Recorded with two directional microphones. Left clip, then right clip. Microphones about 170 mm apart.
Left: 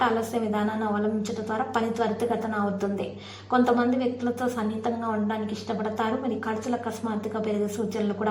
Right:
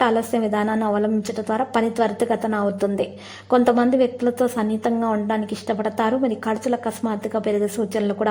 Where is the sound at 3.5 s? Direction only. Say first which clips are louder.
Right 6 dB; 40° right (ahead or behind).